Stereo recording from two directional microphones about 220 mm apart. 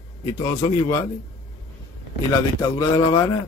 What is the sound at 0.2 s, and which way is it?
Speech, 15° left (ahead or behind).